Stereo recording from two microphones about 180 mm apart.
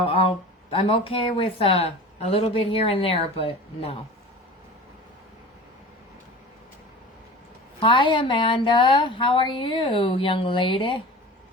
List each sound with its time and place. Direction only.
0.0 s speech: 30° left (ahead or behind)
7.8 s a woman's voice: 30° left (ahead or behind)